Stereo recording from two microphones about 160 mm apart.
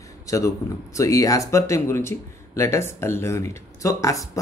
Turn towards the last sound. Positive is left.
turn(degrees=20)  # may be behind; listen again after turning